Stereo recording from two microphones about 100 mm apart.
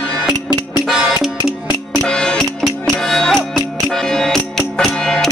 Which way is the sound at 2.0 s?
10° left (ahead or behind).